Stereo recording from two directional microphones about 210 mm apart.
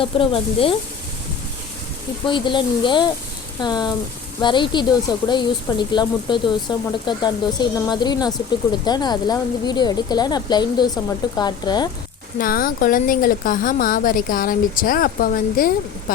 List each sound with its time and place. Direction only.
0.0 s speech: 25° left (ahead or behind)
2.2 s speech: 25° left (ahead or behind)
12.4 s a woman's voice: 45° left (ahead or behind)